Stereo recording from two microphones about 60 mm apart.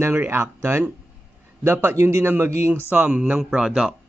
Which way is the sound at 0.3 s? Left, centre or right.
Right.